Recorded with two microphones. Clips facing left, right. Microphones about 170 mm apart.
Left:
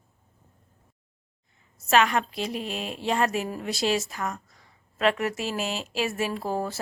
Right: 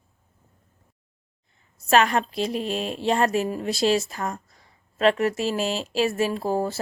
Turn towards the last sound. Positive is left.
turn(degrees=-30)  # may be behind; listen again after turning